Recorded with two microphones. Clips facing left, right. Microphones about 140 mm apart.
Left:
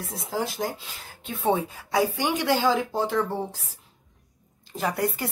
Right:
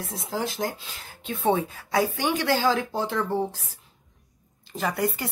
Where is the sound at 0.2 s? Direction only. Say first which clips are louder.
Even; 5° left (ahead or behind).